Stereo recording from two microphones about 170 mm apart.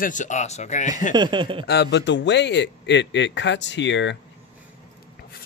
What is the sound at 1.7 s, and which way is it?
A man's voice, 80° left.